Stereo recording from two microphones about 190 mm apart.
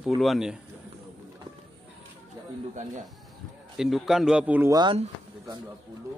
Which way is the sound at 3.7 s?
Centre (ahead or behind).